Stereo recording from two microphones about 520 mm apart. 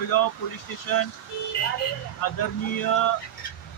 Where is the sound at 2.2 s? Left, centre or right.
Left.